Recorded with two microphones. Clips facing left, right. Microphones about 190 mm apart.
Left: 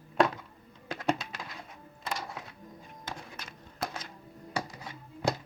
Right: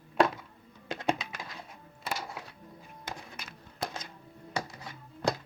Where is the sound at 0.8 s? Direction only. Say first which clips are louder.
Even; 20° right (ahead or behind).